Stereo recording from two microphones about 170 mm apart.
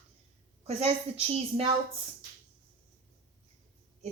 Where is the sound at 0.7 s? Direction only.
35° right (ahead or behind).